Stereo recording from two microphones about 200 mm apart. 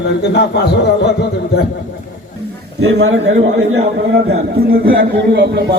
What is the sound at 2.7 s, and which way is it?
A man's voice, 70° right (ahead or behind).